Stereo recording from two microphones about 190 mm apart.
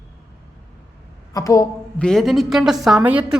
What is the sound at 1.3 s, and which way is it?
Speech, 15° left (ahead or behind).